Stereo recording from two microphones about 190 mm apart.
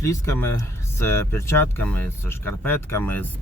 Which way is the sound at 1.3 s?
15° left (ahead or behind).